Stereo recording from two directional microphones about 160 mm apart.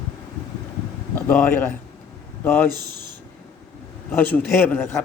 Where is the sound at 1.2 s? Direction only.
15° left (ahead or behind).